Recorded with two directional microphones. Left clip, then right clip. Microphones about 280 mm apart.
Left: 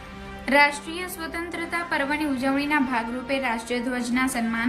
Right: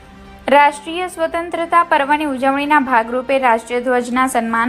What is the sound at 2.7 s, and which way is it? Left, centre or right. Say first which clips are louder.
A woman's voice: right 11 dB; right.